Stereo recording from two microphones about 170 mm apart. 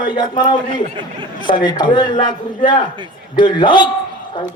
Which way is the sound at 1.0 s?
30° right (ahead or behind).